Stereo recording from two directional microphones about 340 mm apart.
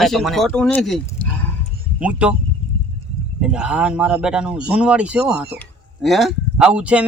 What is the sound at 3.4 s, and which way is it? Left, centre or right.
Speech, centre.